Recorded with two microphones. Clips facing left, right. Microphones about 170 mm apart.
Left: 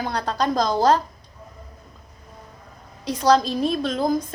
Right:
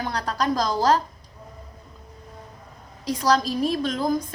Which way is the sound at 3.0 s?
25° left (ahead or behind).